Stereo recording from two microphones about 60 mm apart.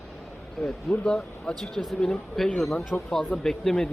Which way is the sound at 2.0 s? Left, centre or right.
Centre.